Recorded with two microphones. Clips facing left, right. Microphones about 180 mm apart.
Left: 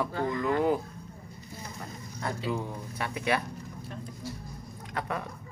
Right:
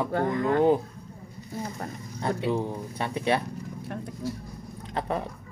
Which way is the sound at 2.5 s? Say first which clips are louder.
Right 5 dB; 30° right (ahead or behind).